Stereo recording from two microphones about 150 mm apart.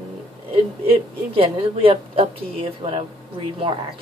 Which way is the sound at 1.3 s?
40° right (ahead or behind).